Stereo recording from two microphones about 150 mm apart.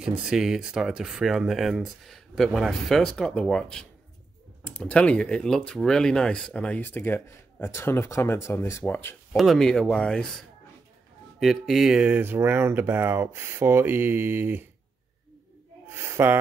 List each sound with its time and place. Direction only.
0.0 s speech: 5° right (ahead or behind); by 9.4 s 15° left (ahead or behind)
9.4 s speech: centre (ahead or behind); by 14.7 s 15° right (ahead or behind)
15.9 s a sound: 15° right (ahead or behind)